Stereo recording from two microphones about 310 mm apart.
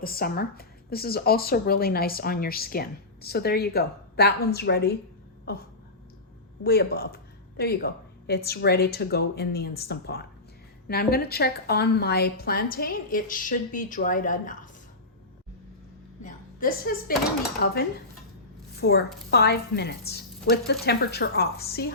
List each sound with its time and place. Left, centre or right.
0.0 s a woman's voice: left
6.7 s a woman's voice: left
16.2 s a woman's voice: left
18.8 s a woman's voice: left